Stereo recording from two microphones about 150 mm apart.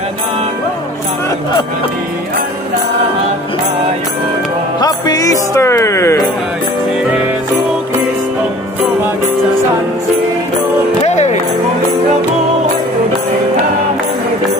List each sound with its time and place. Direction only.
4.8 s speech: 25° left (ahead or behind)
11.0 s music: 50° left (ahead or behind)